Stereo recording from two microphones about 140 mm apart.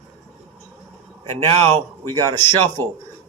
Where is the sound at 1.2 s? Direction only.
45° right (ahead or behind).